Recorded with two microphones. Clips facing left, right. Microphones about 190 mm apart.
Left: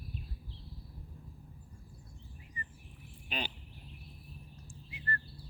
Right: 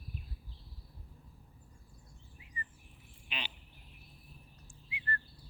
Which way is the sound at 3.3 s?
45° left (ahead or behind).